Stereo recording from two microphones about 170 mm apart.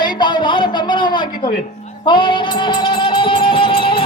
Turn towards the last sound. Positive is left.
turn(degrees=30)  # may be behind; listen again after turning